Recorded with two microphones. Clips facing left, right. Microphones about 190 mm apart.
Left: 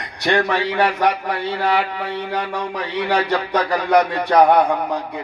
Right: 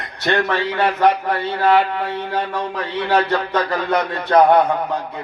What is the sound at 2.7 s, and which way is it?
A man's voice, 15° left (ahead or behind).